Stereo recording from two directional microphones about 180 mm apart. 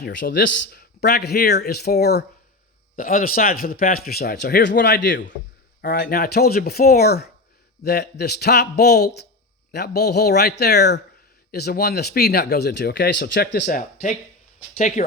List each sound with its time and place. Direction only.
0.0 s speech: 75° left (ahead or behind)
2.9 s speech: 50° left (ahead or behind)
13.7 s speech: 45° left (ahead or behind)